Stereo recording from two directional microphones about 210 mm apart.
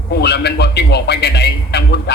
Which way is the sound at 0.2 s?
50° left (ahead or behind).